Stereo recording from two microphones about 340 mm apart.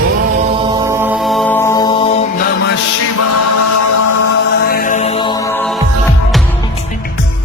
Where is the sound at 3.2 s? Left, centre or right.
Left.